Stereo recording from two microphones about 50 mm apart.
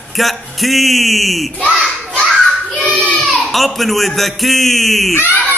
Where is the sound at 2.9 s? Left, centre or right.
Left.